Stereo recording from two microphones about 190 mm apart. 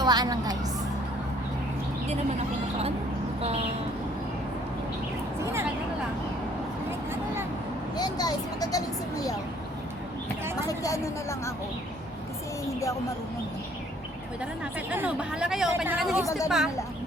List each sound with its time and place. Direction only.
0.0 s a woman's voice: 20° right (ahead or behind)
3.4 s speech: 30° right (ahead or behind)
7.9 s speech: 20° left (ahead or behind)
10.7 s speech: 15° left (ahead or behind)
12.6 s speech: 15° left (ahead or behind)
14.6 s speech: 5° right (ahead or behind)